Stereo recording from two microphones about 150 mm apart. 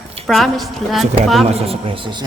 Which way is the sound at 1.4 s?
40° right (ahead or behind).